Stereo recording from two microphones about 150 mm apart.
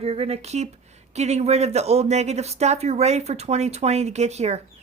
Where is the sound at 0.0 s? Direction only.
40° right (ahead or behind).